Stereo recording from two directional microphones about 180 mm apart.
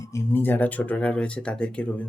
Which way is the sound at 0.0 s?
15° left (ahead or behind).